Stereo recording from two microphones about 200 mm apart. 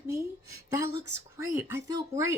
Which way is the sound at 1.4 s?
10° right (ahead or behind).